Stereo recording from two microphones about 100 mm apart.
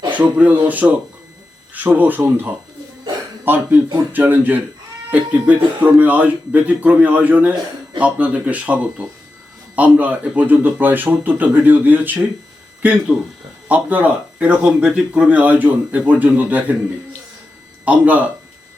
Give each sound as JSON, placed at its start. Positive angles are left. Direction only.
{"t": 0.1, "sound": "speech", "side_deg": -15}
{"t": 13.1, "sound": "speech", "side_deg": 5}
{"t": 13.7, "sound": "speech", "side_deg": -15}
{"t": 17.8, "sound": "speech", "side_deg": -15}